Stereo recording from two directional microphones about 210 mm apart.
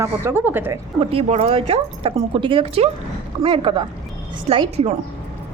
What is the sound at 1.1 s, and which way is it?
Speech, 30° right (ahead or behind).